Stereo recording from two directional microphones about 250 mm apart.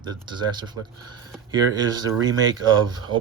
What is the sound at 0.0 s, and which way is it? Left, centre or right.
Speech, centre.